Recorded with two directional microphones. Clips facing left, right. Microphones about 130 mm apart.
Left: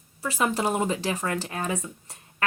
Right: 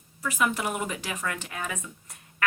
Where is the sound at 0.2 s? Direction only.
30° left (ahead or behind).